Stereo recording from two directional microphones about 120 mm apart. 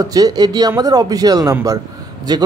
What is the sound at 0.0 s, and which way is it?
Speech, 30° right (ahead or behind).